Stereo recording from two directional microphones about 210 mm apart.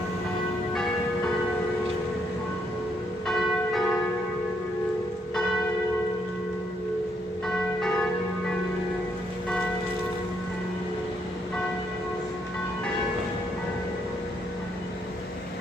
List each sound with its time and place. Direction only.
3.2 s church bell: centre (ahead or behind)
7.4 s church bell: centre (ahead or behind)